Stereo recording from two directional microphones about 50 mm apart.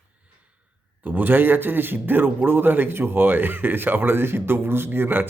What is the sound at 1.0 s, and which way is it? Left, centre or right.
A man's voice, right.